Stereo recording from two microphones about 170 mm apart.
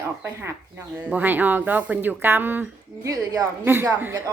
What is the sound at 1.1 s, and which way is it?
A woman's voice, 10° right (ahead or behind).